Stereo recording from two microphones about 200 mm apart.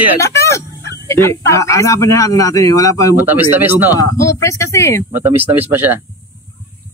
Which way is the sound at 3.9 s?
15° left (ahead or behind).